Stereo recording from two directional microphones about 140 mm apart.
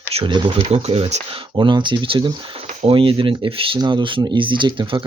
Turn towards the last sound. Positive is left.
turn(degrees=-35)  # may be behind; listen again after turning